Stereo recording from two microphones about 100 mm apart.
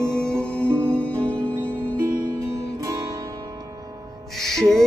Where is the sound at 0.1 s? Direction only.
10° left (ahead or behind).